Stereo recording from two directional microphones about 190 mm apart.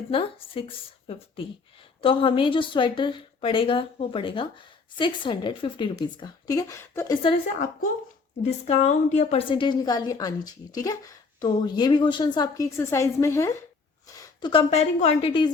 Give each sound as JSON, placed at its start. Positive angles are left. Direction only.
{"t": 0.1, "sound": "a woman's voice", "side_deg": 30}
{"t": 8.4, "sound": "a woman's voice", "side_deg": 35}